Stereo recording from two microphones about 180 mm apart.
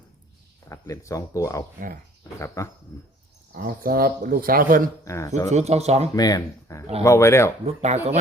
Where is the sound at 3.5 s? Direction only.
55° right (ahead or behind).